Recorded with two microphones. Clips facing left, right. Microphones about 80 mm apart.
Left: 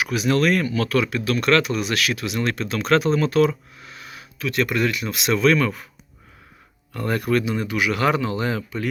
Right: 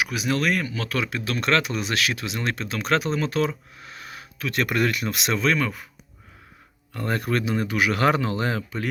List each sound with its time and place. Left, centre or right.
0.0 s speech: centre
3.8 s speech: right; by 5.9 s centre
6.9 s speech: right